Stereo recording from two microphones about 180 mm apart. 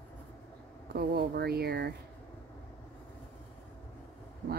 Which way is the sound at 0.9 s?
60° right (ahead or behind).